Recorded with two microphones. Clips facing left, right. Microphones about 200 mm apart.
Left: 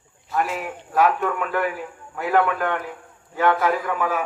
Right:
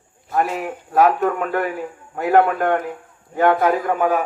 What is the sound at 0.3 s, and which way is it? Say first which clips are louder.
Speech: right 4 dB; 40° right (ahead or behind).